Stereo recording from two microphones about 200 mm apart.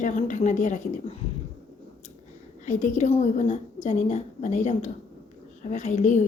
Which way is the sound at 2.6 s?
35° left (ahead or behind).